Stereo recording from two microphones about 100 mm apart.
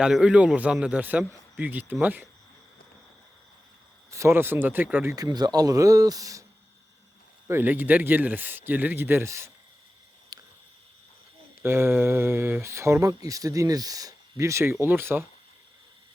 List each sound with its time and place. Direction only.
0.0 s a man's voice: 10° right (ahead or behind)
4.1 s speech: 30° right (ahead or behind)
5.1 s speech: 40° right (ahead or behind)
7.4 s speech: 20° right (ahead or behind)
10.3 s a sound: 40° right (ahead or behind)
11.6 s speech: 25° right (ahead or behind)